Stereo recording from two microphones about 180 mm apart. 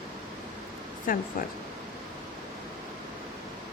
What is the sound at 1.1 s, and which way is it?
Speech, 50° left (ahead or behind).